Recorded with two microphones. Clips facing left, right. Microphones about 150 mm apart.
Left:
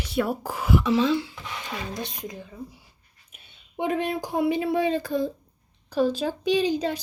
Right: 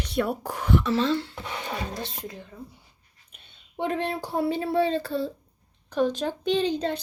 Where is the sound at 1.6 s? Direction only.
35° right (ahead or behind).